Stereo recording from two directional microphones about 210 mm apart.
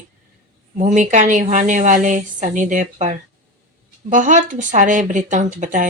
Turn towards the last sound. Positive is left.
turn(degrees=-40)  # may be behind; listen again after turning